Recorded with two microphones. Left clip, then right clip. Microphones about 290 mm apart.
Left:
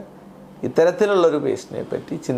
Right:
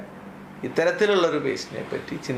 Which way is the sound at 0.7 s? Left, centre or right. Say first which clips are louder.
Left 4 dB; left.